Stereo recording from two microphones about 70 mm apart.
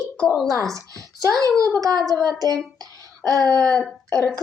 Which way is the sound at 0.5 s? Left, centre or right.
Right.